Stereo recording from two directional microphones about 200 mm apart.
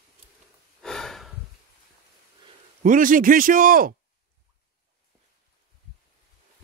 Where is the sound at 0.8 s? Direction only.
Centre (ahead or behind).